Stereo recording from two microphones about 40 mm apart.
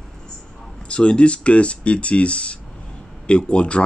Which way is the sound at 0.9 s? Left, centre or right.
Left.